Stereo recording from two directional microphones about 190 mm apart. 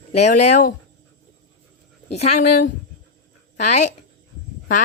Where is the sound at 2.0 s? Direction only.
35° left (ahead or behind).